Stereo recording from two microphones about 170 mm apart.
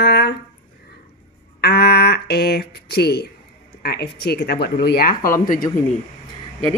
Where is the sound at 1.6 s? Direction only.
70° left (ahead or behind).